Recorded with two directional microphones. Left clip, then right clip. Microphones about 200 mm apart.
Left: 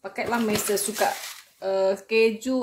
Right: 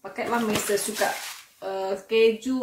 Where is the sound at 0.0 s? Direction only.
70° left (ahead or behind).